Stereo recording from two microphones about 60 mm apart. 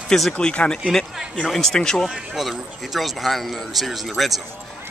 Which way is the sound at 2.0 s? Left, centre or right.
Centre.